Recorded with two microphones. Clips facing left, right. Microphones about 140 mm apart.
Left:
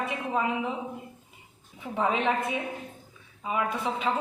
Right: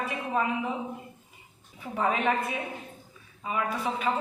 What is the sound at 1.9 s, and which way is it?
Speech, 20° left (ahead or behind).